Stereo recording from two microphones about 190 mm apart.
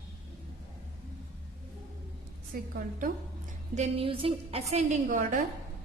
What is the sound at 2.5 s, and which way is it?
Speech, 50° right (ahead or behind).